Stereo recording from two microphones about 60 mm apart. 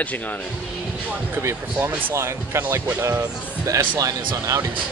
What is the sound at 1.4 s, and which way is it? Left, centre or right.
Speech, right.